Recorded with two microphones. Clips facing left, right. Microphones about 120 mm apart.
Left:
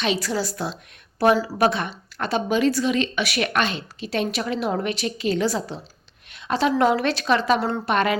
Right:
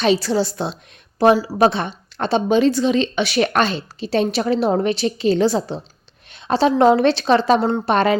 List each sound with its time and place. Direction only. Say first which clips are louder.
0.0 s speech: right 7 dB; 30° right (ahead or behind); by 1.5 s 15° right (ahead or behind)
1.5 s speech: right 4 dB; 30° right (ahead or behind)